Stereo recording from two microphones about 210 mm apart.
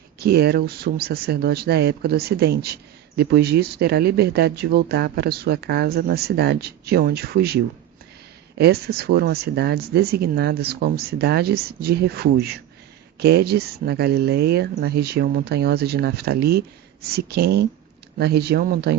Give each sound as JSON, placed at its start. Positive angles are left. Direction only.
{"t": 0.2, "sound": "speech", "side_deg": -50}